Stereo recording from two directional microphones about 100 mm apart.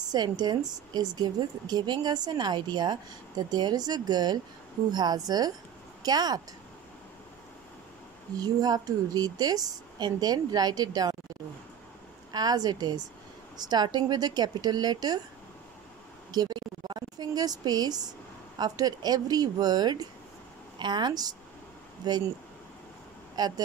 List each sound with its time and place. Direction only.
0.1 s a woman's voice: 45° right (ahead or behind)
8.4 s a woman's voice: 40° right (ahead or behind)
12.3 s a woman's voice: 40° right (ahead or behind)
16.3 s a woman's voice: 45° right (ahead or behind)
23.3 s speech: 40° right (ahead or behind)